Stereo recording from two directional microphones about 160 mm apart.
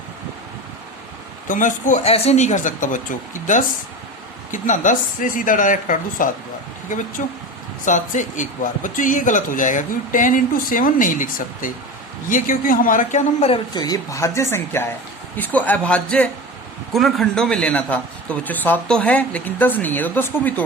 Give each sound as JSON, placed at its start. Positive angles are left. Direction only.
{"t": 1.5, "sound": "speech", "side_deg": 55}
{"t": 13.5, "sound": "a man's voice", "side_deg": 25}